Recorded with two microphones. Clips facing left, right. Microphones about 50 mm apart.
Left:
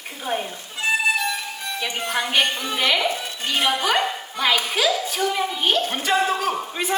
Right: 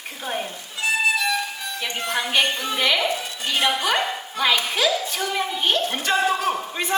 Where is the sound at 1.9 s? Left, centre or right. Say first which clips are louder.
Even; centre.